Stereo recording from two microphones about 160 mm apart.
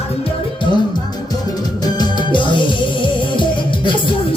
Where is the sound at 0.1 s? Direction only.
35° left (ahead or behind).